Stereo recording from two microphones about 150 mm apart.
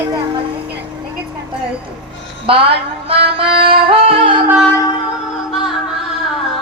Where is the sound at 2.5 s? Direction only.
40° right (ahead or behind).